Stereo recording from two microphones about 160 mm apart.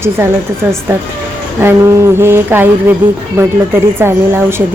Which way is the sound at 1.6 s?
15° right (ahead or behind).